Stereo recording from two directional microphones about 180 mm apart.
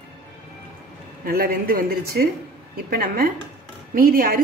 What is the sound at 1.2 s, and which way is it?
A woman's voice, 55° right (ahead or behind).